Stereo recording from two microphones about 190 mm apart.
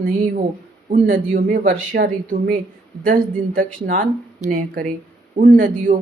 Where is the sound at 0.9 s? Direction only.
45° right (ahead or behind).